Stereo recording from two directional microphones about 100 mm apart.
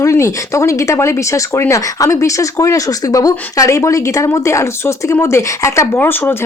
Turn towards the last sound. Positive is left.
turn(degrees=20)  # may be behind; listen again after turning